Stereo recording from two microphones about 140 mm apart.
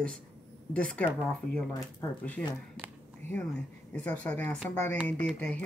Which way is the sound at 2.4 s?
10° left (ahead or behind).